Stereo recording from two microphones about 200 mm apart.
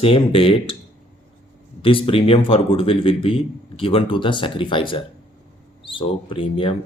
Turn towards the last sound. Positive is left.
turn(degrees=25)  # may be behind; listen again after turning